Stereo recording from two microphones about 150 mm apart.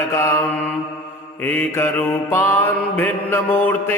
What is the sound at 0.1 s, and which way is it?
Mantra, 20° left (ahead or behind).